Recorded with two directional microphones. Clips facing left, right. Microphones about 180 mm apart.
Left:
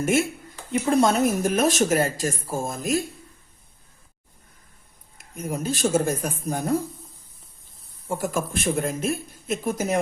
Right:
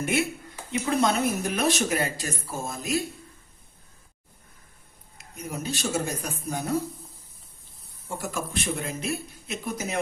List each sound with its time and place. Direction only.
0.0 s speech: 45° left (ahead or behind)
5.1 s speech: 50° left (ahead or behind)
8.2 s speech: 50° left (ahead or behind)